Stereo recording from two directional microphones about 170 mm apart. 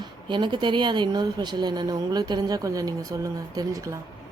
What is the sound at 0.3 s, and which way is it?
A woman's voice, 30° right (ahead or behind).